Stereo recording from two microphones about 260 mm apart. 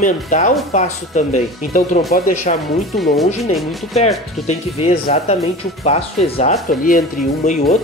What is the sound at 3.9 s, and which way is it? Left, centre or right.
Speech, left.